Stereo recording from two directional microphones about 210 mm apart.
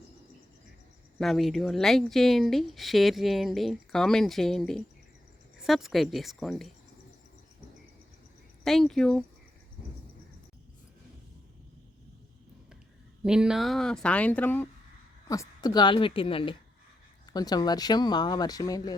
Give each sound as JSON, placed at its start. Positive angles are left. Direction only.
{"t": 1.2, "sound": "a woman's voice", "side_deg": 0}
{"t": 8.6, "sound": "a woman's voice", "side_deg": 0}
{"t": 13.2, "sound": "a woman's voice", "side_deg": -5}